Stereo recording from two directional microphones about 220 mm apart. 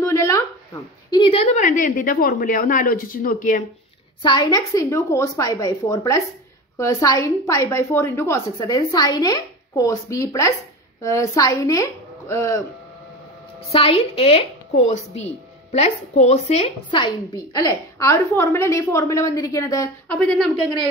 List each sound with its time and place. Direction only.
0.0 s a sound: 15° left (ahead or behind)
1.1 s a woman's voice: 25° left (ahead or behind)
4.2 s a woman's voice: 20° left (ahead or behind)
13.7 s a woman's voice: 25° left (ahead or behind)